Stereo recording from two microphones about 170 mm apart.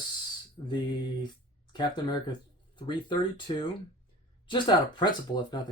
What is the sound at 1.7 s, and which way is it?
Speech, 25° left (ahead or behind).